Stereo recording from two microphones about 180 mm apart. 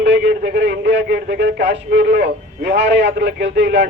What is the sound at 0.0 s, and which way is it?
Speech, 70° right (ahead or behind).